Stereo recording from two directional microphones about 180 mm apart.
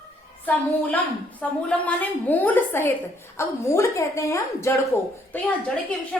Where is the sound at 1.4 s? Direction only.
5° left (ahead or behind).